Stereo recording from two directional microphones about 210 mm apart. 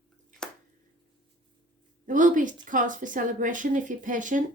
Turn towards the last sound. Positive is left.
turn(degrees=-40)  # may be behind; listen again after turning